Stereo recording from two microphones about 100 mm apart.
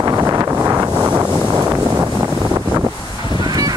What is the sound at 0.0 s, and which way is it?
Wind noise, 30° right (ahead or behind).